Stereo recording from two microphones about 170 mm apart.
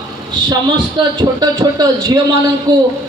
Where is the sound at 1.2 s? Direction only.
20° right (ahead or behind).